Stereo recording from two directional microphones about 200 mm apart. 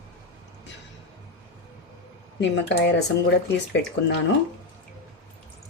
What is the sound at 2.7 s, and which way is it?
A woman's voice, 60° left (ahead or behind).